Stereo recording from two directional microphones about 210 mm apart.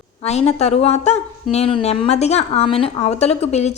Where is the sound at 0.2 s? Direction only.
30° left (ahead or behind).